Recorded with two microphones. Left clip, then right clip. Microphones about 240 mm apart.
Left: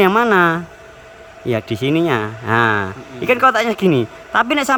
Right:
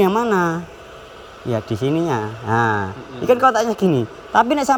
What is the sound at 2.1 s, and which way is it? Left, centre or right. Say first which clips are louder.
Speech: left 3 dB; left.